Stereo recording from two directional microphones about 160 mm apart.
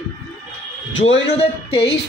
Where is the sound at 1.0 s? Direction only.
40° left (ahead or behind).